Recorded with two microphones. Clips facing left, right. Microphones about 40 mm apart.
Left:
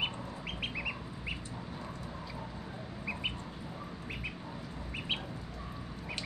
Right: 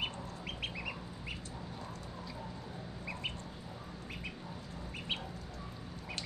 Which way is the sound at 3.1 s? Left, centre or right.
Centre.